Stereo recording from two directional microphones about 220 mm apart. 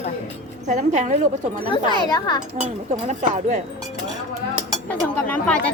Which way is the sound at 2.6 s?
30° right (ahead or behind).